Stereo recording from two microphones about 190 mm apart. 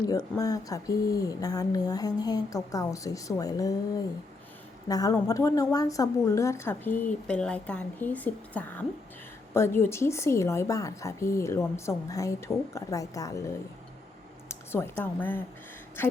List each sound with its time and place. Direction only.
0.0 s speech: 20° left (ahead or behind)
4.9 s a woman's voice: 20° left (ahead or behind)
14.7 s a woman's voice: 10° left (ahead or behind)